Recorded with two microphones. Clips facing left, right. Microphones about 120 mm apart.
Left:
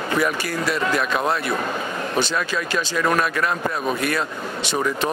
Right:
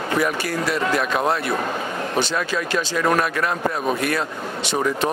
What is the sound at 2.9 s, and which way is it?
Speech, 40° right (ahead or behind).